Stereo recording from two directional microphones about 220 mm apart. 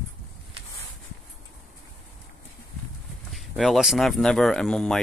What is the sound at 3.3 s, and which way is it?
Speech, centre (ahead or behind).